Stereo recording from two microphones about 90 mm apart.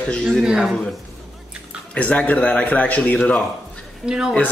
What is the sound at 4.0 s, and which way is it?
Speech, 5° right (ahead or behind).